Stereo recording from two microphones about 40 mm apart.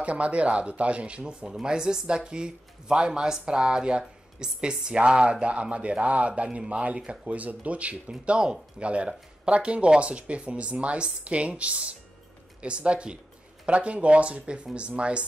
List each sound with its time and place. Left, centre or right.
0.0 s speech: right
8.1 s speech: right